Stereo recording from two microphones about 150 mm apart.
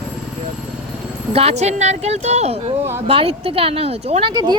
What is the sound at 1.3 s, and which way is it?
Speech, 45° right (ahead or behind).